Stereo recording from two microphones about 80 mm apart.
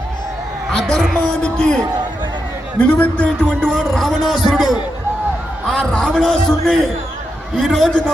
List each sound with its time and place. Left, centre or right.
0.7 s music: centre
2.7 s speech: centre
3.2 s music: centre
5.6 s a man's voice: centre